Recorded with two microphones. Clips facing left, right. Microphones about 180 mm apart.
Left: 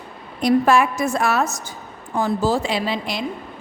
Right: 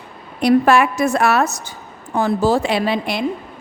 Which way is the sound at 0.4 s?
70° right (ahead or behind).